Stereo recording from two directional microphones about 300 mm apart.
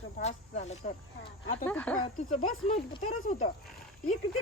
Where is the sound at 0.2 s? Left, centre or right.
Left.